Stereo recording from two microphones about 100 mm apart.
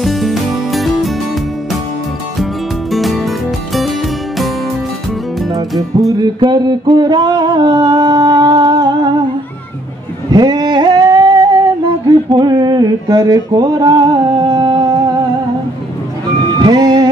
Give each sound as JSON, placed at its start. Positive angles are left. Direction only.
{"t": 0.0, "sound": "music", "side_deg": 0}
{"t": 2.9, "sound": "music", "side_deg": 0}
{"t": 5.5, "sound": "music", "side_deg": -35}
{"t": 6.4, "sound": "a sound", "side_deg": -45}
{"t": 10.3, "sound": "a sound", "side_deg": -45}
{"t": 16.6, "sound": "music", "side_deg": -45}